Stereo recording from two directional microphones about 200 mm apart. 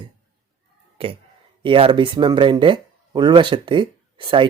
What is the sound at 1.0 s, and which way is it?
Speech, 25° right (ahead or behind).